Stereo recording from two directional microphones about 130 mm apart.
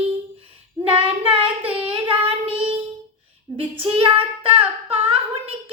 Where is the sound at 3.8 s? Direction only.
50° right (ahead or behind).